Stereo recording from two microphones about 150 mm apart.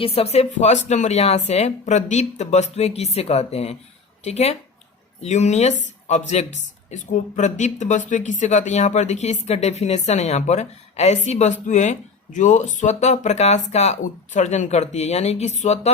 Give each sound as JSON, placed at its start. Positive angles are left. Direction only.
{"t": 0.0, "sound": "speech", "side_deg": 40}